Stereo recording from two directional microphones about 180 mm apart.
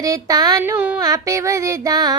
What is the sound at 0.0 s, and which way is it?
Child singing, 20° right (ahead or behind).